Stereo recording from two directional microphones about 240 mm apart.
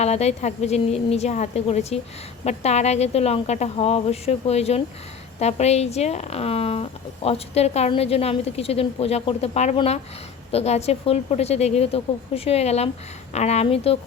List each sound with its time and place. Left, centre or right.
0.0 s a woman's voice: left